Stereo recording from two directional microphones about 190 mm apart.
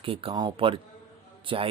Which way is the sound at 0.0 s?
30° right (ahead or behind).